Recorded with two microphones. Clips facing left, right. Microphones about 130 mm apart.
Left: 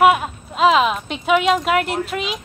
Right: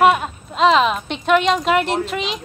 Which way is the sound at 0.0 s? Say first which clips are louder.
Even; 5° left (ahead or behind).